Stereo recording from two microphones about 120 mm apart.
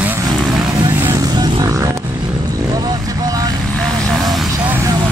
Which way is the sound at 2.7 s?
30° right (ahead or behind).